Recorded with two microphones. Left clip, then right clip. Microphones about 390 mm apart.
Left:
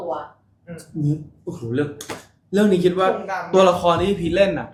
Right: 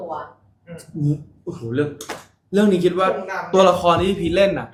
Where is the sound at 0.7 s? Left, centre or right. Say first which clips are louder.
Even; centre.